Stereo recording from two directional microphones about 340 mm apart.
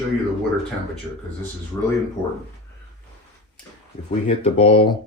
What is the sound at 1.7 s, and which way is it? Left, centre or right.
Speech, centre.